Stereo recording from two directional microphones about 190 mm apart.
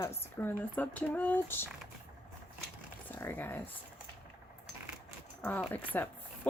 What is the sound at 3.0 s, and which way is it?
Speech, 10° left (ahead or behind).